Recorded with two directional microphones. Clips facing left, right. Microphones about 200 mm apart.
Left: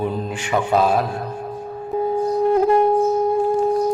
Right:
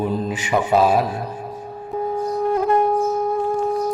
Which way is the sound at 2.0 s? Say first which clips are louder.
Left 3 dB; 25° left (ahead or behind).